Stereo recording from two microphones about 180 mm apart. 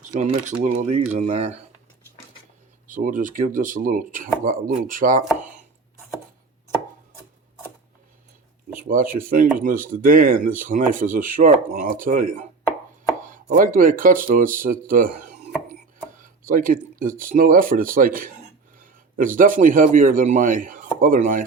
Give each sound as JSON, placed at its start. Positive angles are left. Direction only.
{"t": 0.1, "sound": "speech", "side_deg": -40}
{"t": 2.8, "sound": "speech", "side_deg": -45}
{"t": 8.9, "sound": "speech", "side_deg": -50}
{"t": 13.5, "sound": "a man's voice", "side_deg": -50}